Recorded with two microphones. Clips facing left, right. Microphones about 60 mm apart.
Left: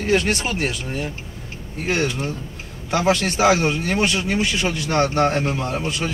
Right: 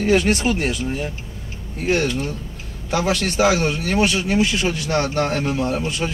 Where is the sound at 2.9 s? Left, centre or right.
Left.